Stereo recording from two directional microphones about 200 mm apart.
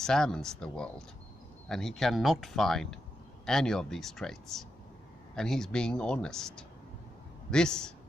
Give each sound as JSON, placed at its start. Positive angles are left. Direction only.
{"t": 0.0, "sound": "speech", "side_deg": 5}